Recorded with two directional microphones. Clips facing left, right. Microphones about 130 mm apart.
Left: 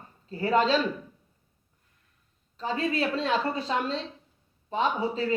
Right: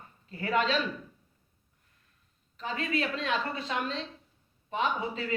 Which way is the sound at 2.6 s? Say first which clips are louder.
Left 4 dB; 35° left (ahead or behind).